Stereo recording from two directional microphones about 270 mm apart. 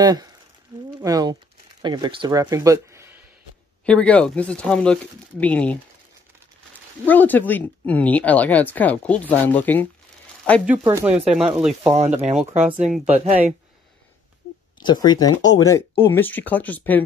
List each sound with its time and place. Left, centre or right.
0.0 s speech: centre
3.8 s speech: centre
7.1 s speech: centre
10.7 s speech: centre
13.1 s speech: right
14.8 s speech: centre